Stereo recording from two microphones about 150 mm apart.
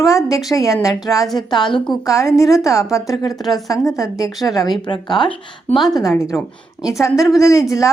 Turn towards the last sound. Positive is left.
turn(degrees=20)  # may be behind; listen again after turning